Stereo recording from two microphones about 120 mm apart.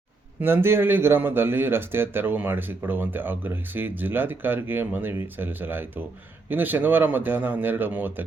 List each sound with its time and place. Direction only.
0.3 s speech: 20° right (ahead or behind)